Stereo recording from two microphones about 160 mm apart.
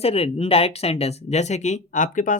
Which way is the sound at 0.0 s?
40° left (ahead or behind).